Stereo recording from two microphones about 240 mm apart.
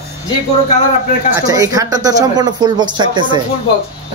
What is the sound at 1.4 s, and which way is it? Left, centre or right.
Speech, centre.